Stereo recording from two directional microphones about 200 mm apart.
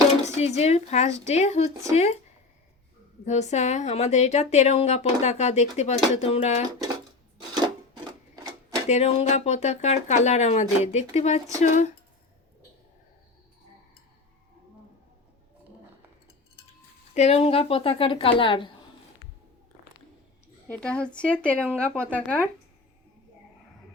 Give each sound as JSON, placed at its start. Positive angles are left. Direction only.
{"t": 0.3, "sound": "a woman's voice", "side_deg": 30}
{"t": 3.2, "sound": "a woman's voice", "side_deg": 35}
{"t": 8.9, "sound": "a woman's voice", "side_deg": 35}
{"t": 17.2, "sound": "a woman's voice", "side_deg": 30}
{"t": 20.7, "sound": "a woman's voice", "side_deg": 5}